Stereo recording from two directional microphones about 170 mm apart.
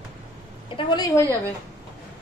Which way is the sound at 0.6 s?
25° left (ahead or behind).